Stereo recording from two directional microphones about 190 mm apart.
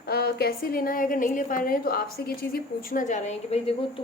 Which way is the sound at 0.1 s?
55° left (ahead or behind).